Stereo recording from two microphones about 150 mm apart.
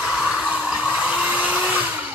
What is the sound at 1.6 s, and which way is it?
Blender, 10° right (ahead or behind).